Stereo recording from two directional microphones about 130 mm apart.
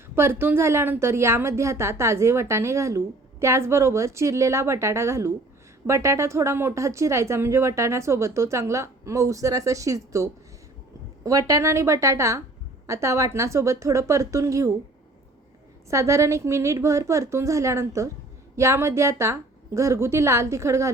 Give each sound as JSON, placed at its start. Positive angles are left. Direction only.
{"t": 0.2, "sound": "a woman's voice", "side_deg": -20}
{"t": 15.9, "sound": "a woman's voice", "side_deg": -25}